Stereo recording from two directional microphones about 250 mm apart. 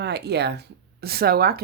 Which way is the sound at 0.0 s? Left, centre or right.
Right.